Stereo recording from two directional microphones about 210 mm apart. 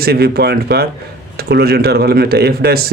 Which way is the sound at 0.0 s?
50° right (ahead or behind).